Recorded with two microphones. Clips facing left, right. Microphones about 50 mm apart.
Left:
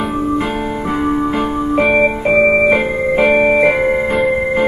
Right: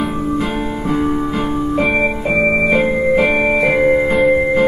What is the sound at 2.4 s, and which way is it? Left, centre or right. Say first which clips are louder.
Keyboard: even; centre.